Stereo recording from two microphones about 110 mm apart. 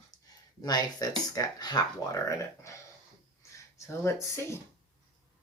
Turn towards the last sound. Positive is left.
turn(degrees=25)  # may be behind; listen again after turning